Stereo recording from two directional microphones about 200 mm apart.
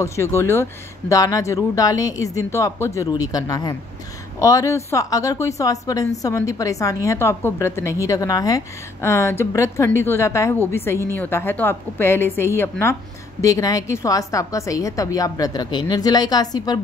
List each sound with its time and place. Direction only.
0.0 s a woman's voice: 15° left (ahead or behind)